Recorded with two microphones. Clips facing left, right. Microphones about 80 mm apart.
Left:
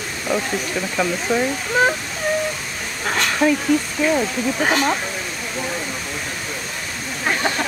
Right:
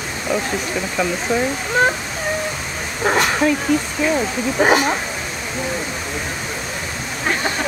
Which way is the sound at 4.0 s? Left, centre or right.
Centre.